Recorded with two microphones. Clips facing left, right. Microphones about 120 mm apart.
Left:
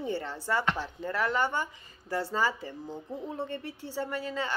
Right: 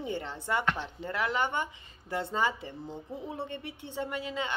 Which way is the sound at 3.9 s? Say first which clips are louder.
Left 1 dB; 20° right (ahead or behind).